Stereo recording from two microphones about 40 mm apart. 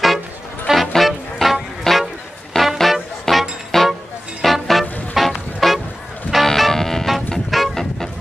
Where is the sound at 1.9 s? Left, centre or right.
Centre.